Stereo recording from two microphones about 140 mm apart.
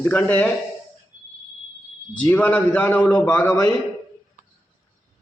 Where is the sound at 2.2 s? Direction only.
10° left (ahead or behind).